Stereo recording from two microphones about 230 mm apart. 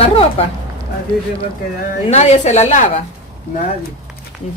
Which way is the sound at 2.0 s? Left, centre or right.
Left.